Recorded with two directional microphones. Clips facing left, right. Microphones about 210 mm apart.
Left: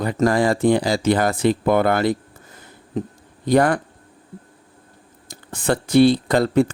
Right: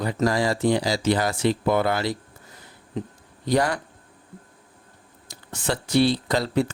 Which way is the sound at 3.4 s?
55° left (ahead or behind).